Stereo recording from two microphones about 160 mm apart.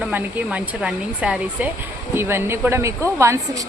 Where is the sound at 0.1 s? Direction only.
10° right (ahead or behind).